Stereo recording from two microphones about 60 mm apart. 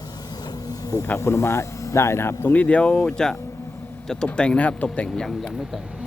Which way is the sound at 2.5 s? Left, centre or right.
Left.